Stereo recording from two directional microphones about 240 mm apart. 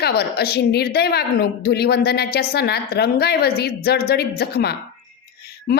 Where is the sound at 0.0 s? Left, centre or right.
Left.